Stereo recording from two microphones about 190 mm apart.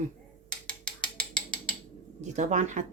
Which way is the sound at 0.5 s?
5° left (ahead or behind).